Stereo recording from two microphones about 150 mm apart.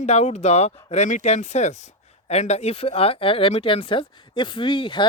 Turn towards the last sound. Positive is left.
turn(degrees=35)  # may be behind; listen again after turning